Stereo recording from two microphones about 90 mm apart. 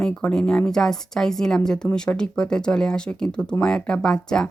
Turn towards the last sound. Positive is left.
turn(degrees=5)  # may be behind; listen again after turning